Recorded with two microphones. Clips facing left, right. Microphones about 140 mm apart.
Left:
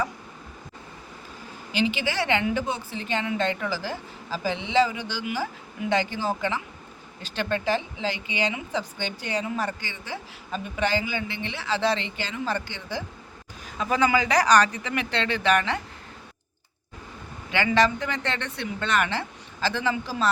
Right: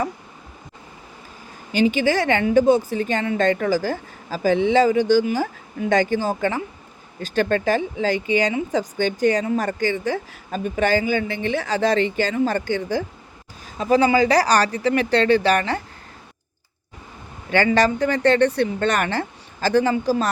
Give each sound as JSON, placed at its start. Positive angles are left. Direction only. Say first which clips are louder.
{"t": 1.7, "sound": "speech", "louder": "right 8 dB", "side_deg": -45}
{"t": 13.7, "sound": "speech", "louder": "right 6 dB", "side_deg": -35}
{"t": 17.5, "sound": "speech", "louder": "right 4 dB", "side_deg": -40}